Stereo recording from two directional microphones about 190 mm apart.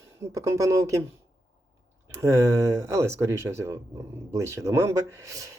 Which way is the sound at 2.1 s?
15° right (ahead or behind).